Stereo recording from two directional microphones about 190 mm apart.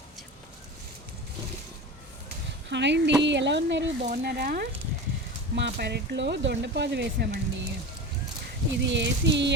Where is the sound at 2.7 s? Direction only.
65° right (ahead or behind).